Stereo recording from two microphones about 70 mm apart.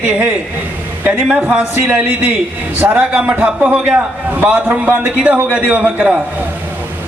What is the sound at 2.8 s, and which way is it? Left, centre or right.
Speech, right.